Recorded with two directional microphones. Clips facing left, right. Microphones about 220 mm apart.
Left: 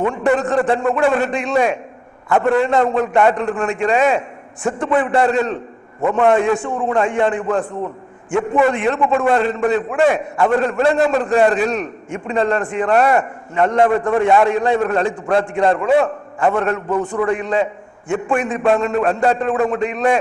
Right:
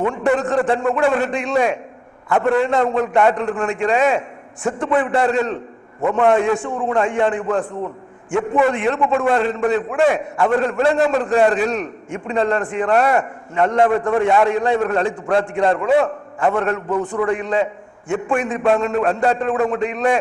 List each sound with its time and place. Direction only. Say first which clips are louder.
0.1 s a man's voice: left 1 dB; 20° left (ahead or behind)